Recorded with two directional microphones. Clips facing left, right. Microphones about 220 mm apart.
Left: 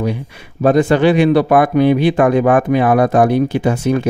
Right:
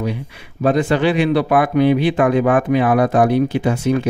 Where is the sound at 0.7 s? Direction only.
45° left (ahead or behind).